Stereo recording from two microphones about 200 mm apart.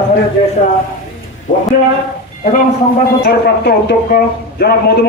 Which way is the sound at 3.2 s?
55° left (ahead or behind).